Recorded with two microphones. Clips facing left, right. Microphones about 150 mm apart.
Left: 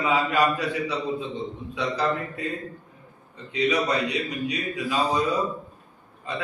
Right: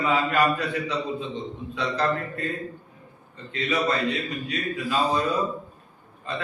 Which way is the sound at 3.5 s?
15° left (ahead or behind).